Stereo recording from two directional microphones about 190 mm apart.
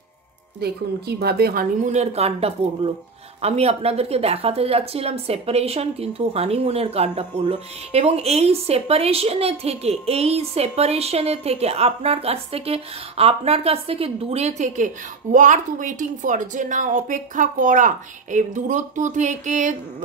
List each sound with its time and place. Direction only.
0.6 s a woman's voice: 55° right (ahead or behind); by 19.7 s 40° right (ahead or behind)